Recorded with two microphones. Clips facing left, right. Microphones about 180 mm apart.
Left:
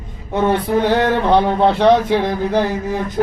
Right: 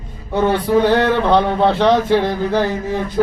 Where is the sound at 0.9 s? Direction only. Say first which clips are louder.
Even; 15° left (ahead or behind).